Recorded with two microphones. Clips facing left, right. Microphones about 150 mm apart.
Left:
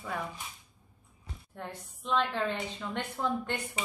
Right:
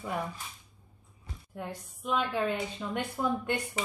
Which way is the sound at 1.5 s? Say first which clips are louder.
Right 3 dB; 10° right (ahead or behind).